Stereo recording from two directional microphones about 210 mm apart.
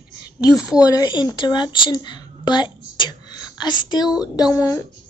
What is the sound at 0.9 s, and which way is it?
A woman's voice, 20° left (ahead or behind).